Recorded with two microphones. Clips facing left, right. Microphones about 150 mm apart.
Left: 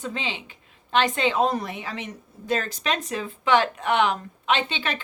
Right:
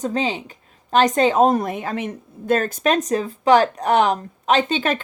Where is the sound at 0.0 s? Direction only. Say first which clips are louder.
Right 9 dB; 40° right (ahead or behind).